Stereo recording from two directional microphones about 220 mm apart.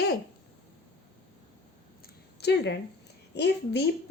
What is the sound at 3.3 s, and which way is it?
Speech, 50° left (ahead or behind).